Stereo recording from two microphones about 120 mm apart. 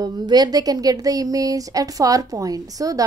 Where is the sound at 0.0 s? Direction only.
35° right (ahead or behind).